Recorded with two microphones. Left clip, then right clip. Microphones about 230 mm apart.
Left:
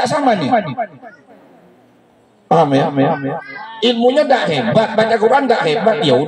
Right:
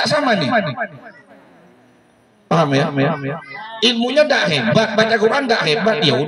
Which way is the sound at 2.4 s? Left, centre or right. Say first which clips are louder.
Left 4 dB; right.